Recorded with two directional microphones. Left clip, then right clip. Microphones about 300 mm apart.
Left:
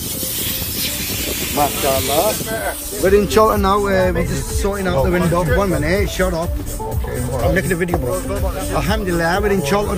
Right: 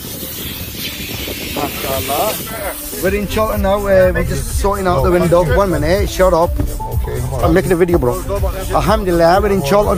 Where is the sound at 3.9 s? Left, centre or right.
Centre.